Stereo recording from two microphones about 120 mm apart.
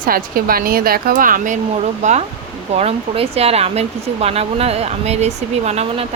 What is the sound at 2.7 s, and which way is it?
Speech, 55° right (ahead or behind).